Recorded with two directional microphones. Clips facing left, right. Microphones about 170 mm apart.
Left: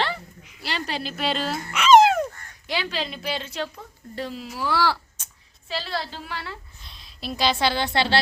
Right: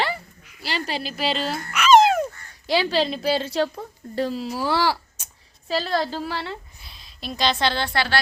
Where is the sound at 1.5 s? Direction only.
20° left (ahead or behind).